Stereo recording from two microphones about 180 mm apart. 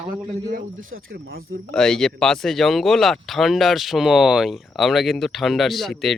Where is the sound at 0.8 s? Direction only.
90° right; by 1.4 s 60° right (ahead or behind).